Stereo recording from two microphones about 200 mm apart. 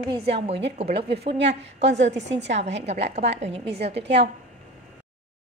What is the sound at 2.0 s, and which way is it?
Speech, 65° right (ahead or behind).